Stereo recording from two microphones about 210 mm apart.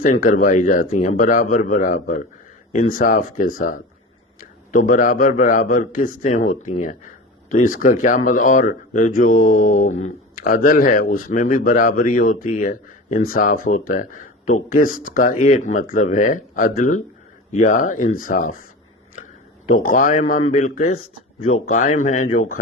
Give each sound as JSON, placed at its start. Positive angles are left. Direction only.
{"t": 0.0, "sound": "speech", "side_deg": 40}
{"t": 19.8, "sound": "speech", "side_deg": 40}
{"t": 20.9, "sound": "speech", "side_deg": 90}
{"t": 21.7, "sound": "speech", "side_deg": 40}